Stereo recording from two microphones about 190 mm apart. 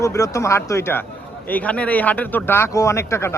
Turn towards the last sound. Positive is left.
turn(degrees=15)  # may be behind; listen again after turning